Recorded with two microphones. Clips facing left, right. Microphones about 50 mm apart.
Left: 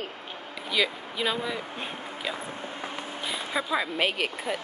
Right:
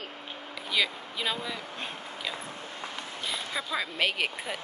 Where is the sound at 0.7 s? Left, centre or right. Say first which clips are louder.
Left 2 dB; centre.